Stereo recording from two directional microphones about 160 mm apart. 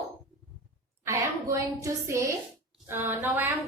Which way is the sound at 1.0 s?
20° right (ahead or behind).